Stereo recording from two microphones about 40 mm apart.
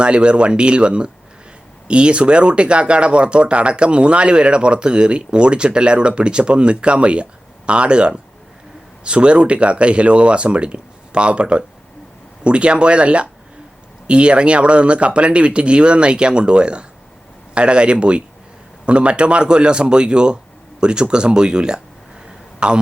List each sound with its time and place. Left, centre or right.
0.0 s speech: right